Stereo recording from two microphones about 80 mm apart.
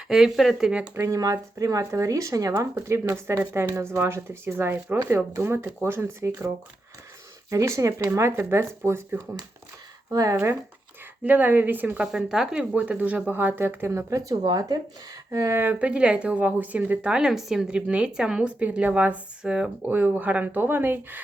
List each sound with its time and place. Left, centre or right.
0.1 s speech: centre
0.9 s speech: right
1.2 s speech: right
7.5 s speech: right
10.1 s speech: right
10.3 s speech: right
12.1 s speech: centre
12.7 s speech: centre
14.1 s speech: right
19.4 s speech: centre; by 21.2 s right